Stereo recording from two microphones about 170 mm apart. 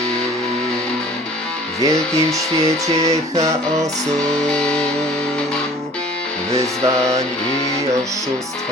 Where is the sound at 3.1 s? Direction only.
40° right (ahead or behind).